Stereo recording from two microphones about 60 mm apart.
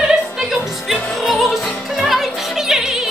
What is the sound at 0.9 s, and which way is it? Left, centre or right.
Opera, centre.